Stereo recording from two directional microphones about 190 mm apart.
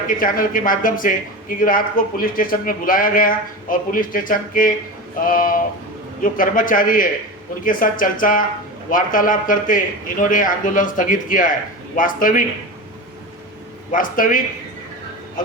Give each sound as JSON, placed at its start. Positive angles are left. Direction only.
{"t": 0.1, "sound": "speech", "side_deg": 45}
{"t": 13.9, "sound": "speech", "side_deg": 45}